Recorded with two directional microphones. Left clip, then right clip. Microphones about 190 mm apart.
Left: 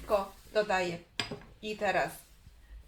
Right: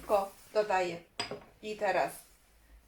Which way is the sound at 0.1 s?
5° right (ahead or behind).